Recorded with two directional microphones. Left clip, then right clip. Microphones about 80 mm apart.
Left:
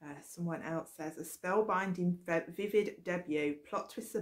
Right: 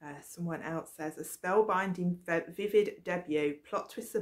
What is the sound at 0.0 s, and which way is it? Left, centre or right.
Speech, right.